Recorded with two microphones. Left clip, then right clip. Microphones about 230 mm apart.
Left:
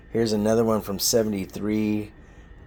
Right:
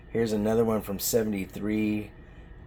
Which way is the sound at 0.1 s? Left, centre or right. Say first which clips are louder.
Left 4 dB; left.